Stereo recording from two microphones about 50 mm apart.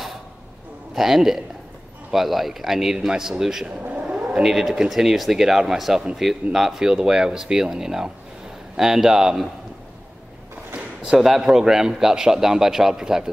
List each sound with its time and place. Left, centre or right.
0.9 s a man's voice: centre
3.6 s vehicle: right
4.3 s a man's voice: centre
11.1 s a man's voice: centre